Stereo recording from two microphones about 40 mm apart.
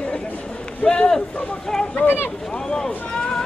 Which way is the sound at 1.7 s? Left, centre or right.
Centre.